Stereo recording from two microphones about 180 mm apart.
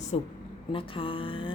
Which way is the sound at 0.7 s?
30° left (ahead or behind).